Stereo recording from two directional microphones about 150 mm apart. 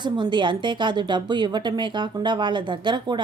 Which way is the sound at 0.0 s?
30° right (ahead or behind).